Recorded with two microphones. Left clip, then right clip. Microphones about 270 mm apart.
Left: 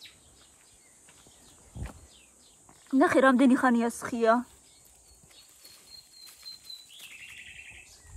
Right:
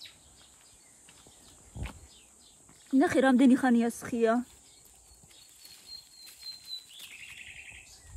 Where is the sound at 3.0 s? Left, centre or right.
Centre.